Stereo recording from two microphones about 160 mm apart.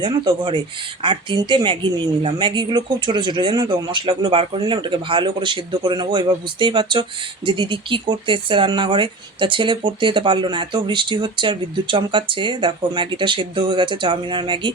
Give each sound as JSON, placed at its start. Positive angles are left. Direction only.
{"t": 0.0, "sound": "speech", "side_deg": -30}